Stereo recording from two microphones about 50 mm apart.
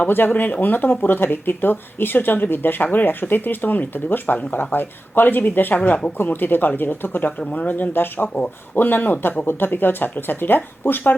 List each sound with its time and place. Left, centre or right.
0.3 s speech: left